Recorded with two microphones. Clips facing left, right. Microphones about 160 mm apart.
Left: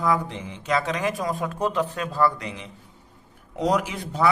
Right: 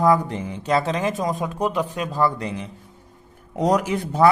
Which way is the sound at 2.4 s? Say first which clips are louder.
Right 6 dB; 35° right (ahead or behind).